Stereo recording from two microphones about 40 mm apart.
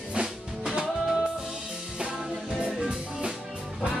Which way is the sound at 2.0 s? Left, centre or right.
Right.